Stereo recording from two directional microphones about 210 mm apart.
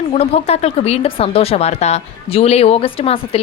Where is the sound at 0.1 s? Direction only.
30° left (ahead or behind).